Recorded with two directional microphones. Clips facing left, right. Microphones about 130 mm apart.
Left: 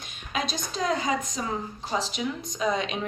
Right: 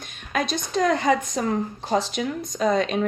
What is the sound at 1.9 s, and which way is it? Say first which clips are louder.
A woman's voice: right 5 dB; 45° right (ahead or behind).